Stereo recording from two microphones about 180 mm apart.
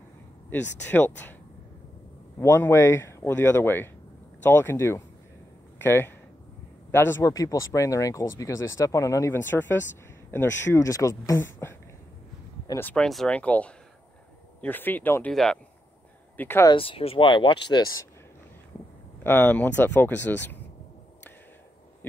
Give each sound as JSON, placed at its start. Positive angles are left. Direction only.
{"t": 0.8, "sound": "speech", "side_deg": 10}
{"t": 2.3, "sound": "speech", "side_deg": 15}
{"t": 16.7, "sound": "speech", "side_deg": 30}
{"t": 19.2, "sound": "speech", "side_deg": 10}